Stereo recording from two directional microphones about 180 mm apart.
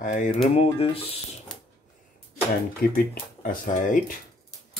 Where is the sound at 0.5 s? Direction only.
35° left (ahead or behind).